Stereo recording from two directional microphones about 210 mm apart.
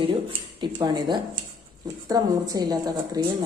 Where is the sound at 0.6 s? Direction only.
20° right (ahead or behind).